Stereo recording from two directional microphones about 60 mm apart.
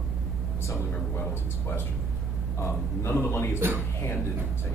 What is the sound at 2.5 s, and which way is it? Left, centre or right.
A man's voice, left.